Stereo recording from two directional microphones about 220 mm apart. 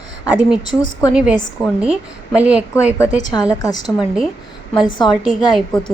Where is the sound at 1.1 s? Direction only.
5° right (ahead or behind).